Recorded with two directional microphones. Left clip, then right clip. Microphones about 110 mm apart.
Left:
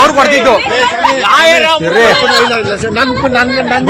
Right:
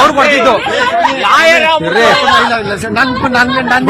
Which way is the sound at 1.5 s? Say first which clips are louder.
Even; 5° right (ahead or behind).